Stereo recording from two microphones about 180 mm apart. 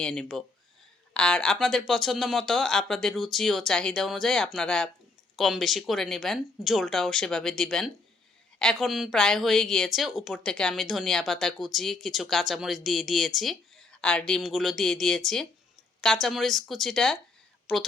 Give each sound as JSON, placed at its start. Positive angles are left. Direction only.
{"t": 0.0, "sound": "a woman's voice", "side_deg": 5}